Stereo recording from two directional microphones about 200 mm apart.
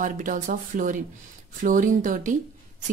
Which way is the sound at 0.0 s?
40° right (ahead or behind).